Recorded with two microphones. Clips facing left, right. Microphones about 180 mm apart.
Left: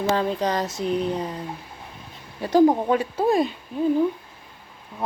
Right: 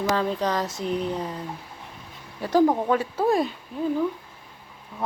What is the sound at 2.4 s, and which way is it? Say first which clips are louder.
A woman's voice: left 3 dB; 20° left (ahead or behind).